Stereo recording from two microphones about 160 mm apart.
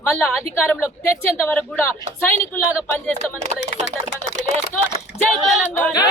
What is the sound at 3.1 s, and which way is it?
Speech, 45° right (ahead or behind).